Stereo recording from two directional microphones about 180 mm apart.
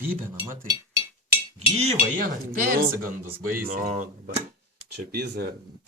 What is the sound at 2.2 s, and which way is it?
Speech, 50° right (ahead or behind).